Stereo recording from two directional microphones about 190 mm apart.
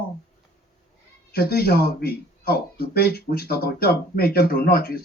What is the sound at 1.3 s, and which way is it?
Speech, 55° left (ahead or behind).